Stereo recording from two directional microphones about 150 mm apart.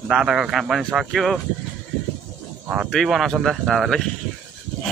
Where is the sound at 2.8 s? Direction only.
Centre (ahead or behind).